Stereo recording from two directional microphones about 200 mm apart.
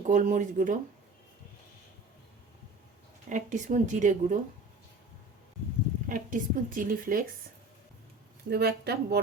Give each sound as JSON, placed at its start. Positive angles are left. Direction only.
{"t": 0.0, "sound": "speech", "side_deg": -40}
{"t": 3.2, "sound": "speech", "side_deg": -40}
{"t": 6.1, "sound": "speech", "side_deg": -40}
{"t": 8.4, "sound": "speech", "side_deg": -55}